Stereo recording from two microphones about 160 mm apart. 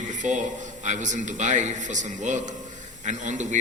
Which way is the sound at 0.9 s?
50° right (ahead or behind).